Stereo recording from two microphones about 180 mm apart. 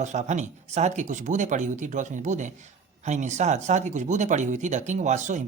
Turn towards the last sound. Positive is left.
turn(degrees=-40)  # may be behind; listen again after turning